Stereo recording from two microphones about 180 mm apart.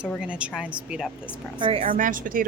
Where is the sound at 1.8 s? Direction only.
50° right (ahead or behind).